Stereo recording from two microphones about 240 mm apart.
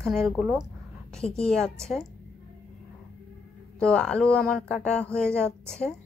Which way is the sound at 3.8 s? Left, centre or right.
Centre.